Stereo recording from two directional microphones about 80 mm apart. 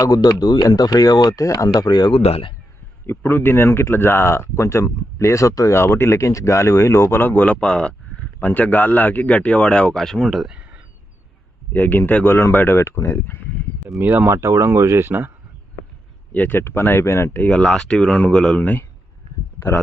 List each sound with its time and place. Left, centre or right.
0.0 s speech: left
3.1 s a man's voice: left; by 10.5 s centre
10.5 s a sound: centre
11.7 s speech: left
14.0 s speech: right
16.3 s speech: left
17.4 s a man's voice: centre
19.5 s a sound: left